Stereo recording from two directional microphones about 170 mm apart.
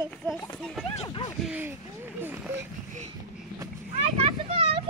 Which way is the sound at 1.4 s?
10° right (ahead or behind).